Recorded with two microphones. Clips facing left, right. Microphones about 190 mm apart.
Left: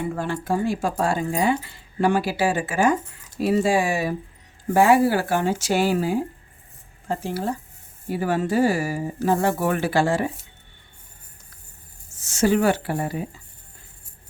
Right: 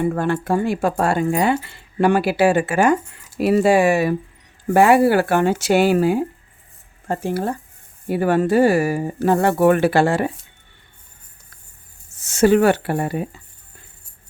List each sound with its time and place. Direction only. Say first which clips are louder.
0.0 s speech: right 7 dB; 60° right (ahead or behind)
7.1 s speech: right 4 dB; 55° right (ahead or behind)
12.2 s speech: right 5 dB; 60° right (ahead or behind)